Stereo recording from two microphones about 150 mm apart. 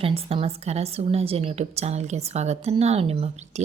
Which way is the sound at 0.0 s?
40° right (ahead or behind).